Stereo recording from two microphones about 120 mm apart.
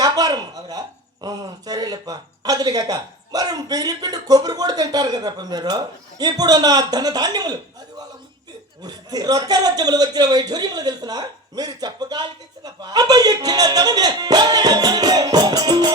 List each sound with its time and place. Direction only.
0.0 s a sound: 30° right (ahead or behind)
1.2 s a man's voice: 35° right (ahead or behind)
8.8 s a man's voice: 35° right (ahead or behind)